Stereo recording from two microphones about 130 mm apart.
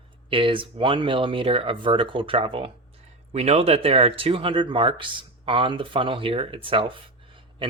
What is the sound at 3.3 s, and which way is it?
Speech, 55° right (ahead or behind).